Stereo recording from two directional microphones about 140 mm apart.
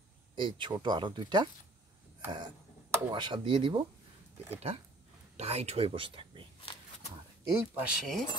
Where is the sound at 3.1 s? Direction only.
35° right (ahead or behind).